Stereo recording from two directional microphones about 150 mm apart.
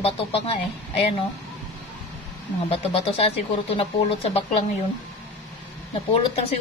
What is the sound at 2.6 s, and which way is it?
Speech, 40° left (ahead or behind).